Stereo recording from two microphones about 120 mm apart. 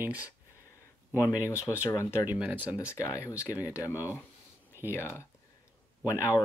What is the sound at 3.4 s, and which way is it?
Speech, 15° right (ahead or behind).